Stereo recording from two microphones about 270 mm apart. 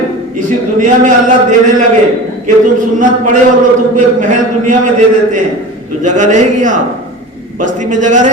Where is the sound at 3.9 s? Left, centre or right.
Right.